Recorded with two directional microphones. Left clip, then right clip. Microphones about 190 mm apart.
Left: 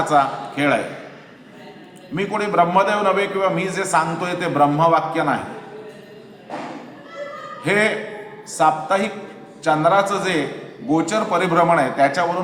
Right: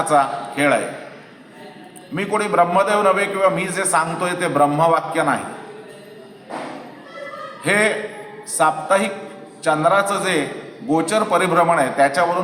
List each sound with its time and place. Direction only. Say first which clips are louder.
0.0 s a man's voice: even; 5° right (ahead or behind)
2.1 s a man's voice: right 1 dB; 10° right (ahead or behind)
7.6 s a man's voice: right 1 dB; 10° right (ahead or behind)